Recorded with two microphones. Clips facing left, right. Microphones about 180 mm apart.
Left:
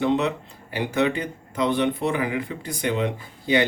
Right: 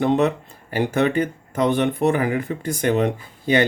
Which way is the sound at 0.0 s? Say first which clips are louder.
Right 4 dB; 50° right (ahead or behind).